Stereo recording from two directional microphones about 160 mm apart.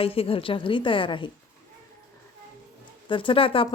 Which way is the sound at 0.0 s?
35° left (ahead or behind).